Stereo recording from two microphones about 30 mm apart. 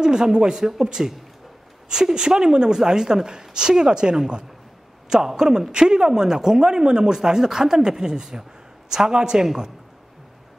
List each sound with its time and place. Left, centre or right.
0.0 s speech: right
5.4 s speech: right